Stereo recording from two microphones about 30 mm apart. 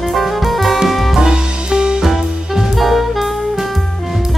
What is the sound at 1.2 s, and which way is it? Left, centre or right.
Music, right.